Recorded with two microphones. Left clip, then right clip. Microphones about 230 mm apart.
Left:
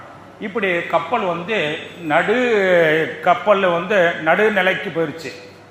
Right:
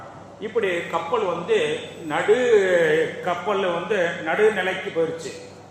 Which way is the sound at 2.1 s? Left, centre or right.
Left.